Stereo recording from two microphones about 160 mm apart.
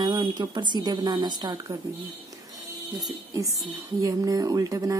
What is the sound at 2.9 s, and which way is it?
Speech, 20° right (ahead or behind).